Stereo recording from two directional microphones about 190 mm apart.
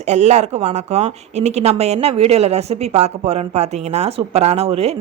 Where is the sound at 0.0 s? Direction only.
35° right (ahead or behind).